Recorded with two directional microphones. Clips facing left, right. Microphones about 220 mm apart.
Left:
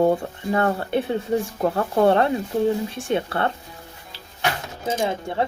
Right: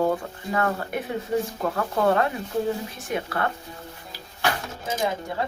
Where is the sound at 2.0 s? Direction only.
30° left (ahead or behind).